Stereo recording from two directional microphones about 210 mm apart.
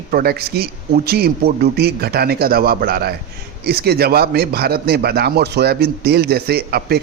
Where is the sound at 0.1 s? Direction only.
45° right (ahead or behind).